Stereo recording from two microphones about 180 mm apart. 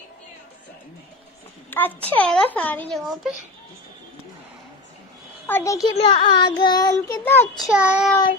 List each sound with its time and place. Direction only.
1.7 s speech: 10° left (ahead or behind)
5.5 s speech: 15° left (ahead or behind)
5.9 s child singing: 30° left (ahead or behind); by 7.4 s 15° left (ahead or behind)
7.5 s child singing: 5° right (ahead or behind)